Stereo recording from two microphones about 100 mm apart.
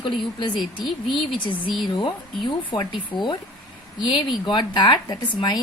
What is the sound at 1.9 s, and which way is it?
A woman's voice, 50° left (ahead or behind).